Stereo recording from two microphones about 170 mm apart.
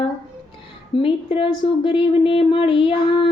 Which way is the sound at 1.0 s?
30° left (ahead or behind).